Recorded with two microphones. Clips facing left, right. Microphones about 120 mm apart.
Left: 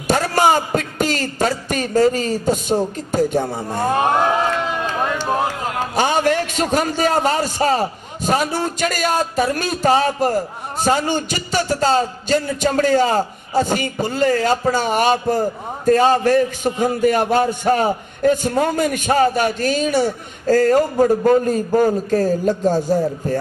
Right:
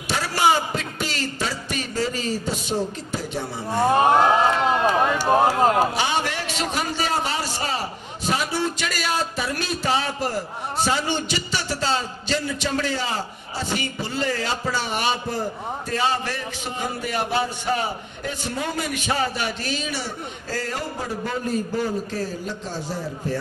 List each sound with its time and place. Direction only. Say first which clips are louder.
0.1 s a man's voice: left 5 dB; 45° left (ahead or behind)
3.8 s a man's voice: even; 5° right (ahead or behind)
5.9 s a man's voice: left 7 dB; 45° left (ahead or behind)